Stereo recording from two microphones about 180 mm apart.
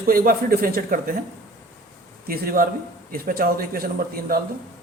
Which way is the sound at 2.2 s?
55° right (ahead or behind).